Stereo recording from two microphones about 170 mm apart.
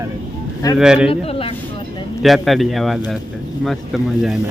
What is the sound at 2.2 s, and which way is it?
A man's voice, centre (ahead or behind).